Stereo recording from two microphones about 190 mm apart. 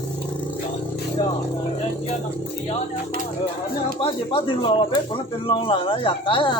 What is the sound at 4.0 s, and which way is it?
Speech, 30° left (ahead or behind).